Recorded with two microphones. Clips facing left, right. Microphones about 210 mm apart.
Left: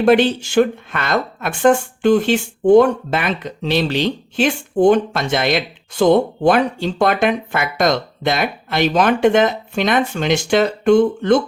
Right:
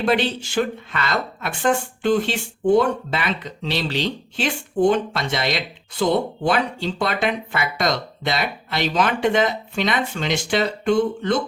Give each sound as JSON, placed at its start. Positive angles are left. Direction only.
{"t": 0.0, "sound": "speech", "side_deg": 50}